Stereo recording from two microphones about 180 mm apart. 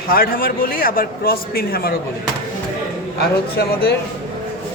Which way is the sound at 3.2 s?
60° left (ahead or behind).